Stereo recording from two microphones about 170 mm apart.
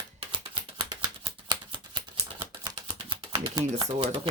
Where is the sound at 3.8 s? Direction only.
35° right (ahead or behind).